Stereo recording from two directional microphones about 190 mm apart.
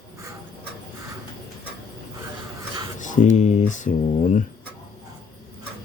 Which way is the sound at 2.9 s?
40° left (ahead or behind).